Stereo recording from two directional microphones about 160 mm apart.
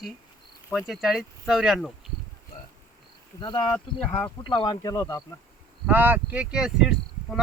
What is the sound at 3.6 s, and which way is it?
Speech, 10° left (ahead or behind).